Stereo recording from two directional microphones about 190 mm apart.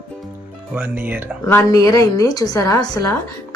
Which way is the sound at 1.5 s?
15° left (ahead or behind).